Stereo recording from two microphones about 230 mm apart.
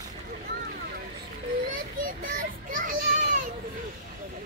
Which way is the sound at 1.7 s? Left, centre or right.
Right.